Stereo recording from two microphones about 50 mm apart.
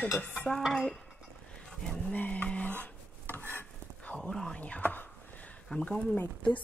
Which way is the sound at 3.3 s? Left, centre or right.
Left.